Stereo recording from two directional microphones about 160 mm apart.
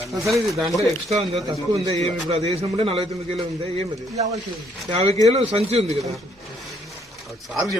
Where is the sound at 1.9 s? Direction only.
40° right (ahead or behind).